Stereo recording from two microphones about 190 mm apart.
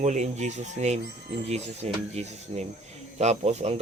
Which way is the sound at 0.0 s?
40° right (ahead or behind).